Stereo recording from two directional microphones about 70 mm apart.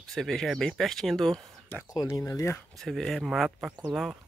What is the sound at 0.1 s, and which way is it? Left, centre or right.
Speech, centre.